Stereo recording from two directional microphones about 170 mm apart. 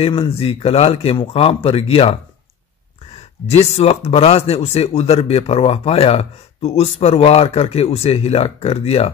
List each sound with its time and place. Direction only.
0.0 s speech: 35° left (ahead or behind)
3.4 s speech: 35° left (ahead or behind)